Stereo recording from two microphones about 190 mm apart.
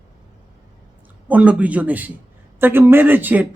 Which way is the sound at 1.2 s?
5° right (ahead or behind).